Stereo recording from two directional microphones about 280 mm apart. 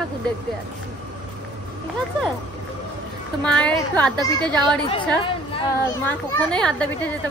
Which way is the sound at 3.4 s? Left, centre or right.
Centre.